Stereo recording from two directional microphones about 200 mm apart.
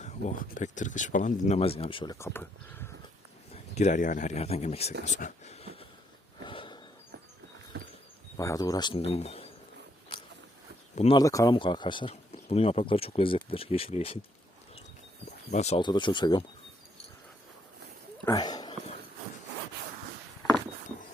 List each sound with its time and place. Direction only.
0.5 s speech: 40° left (ahead or behind)
2.1 s speech: 10° left (ahead or behind)
3.5 s speech: 35° left (ahead or behind)
6.4 s a sound: 25° left (ahead or behind)
7.7 s a sound: 55° right (ahead or behind)
8.4 s speech: 15° left (ahead or behind)
10.9 s speech: 35° left (ahead or behind)
11.2 s speech: 15° left (ahead or behind)
15.5 s speech: 30° left (ahead or behind)
18.3 s a sound: 20° left (ahead or behind)